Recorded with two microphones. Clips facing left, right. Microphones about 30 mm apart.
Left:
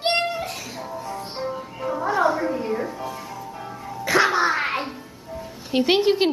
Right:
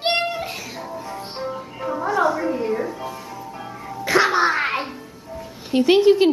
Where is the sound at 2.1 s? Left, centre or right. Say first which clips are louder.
Right 1 dB; centre.